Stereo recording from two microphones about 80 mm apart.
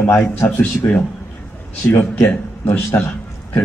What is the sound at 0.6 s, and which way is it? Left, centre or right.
A man's voice, centre.